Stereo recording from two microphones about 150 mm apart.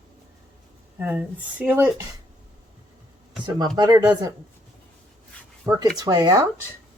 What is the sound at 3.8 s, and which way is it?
Speech, 25° right (ahead or behind).